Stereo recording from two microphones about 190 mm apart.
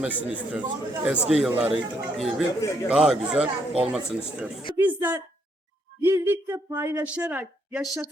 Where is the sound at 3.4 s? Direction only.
30° right (ahead or behind).